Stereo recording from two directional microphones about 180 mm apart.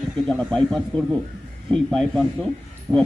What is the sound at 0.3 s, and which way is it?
Speech, 5° left (ahead or behind).